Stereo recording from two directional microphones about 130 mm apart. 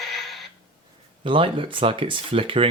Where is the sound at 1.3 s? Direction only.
45° right (ahead or behind).